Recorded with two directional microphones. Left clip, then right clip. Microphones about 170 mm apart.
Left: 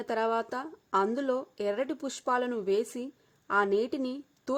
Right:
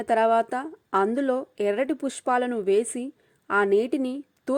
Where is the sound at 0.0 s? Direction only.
25° right (ahead or behind).